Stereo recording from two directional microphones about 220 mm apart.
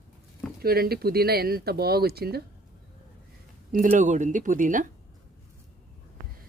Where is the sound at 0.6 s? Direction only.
45° right (ahead or behind).